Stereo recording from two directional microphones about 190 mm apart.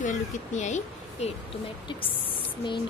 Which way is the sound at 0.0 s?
40° left (ahead or behind).